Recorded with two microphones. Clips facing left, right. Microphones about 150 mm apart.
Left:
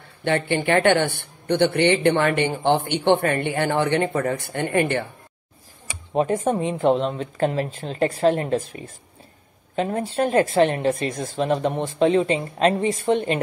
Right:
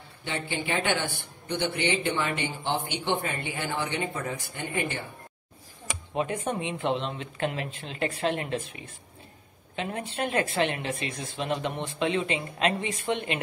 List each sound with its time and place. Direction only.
0.2 s speech: 60° left (ahead or behind)
6.1 s speech: 40° left (ahead or behind)